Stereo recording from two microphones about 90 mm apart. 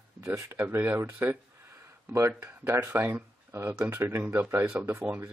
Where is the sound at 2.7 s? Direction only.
30° right (ahead or behind).